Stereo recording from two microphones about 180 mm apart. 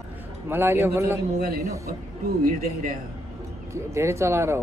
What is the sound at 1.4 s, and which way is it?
Speech, 55° right (ahead or behind).